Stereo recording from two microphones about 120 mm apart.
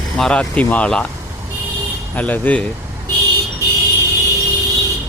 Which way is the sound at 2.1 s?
15° left (ahead or behind).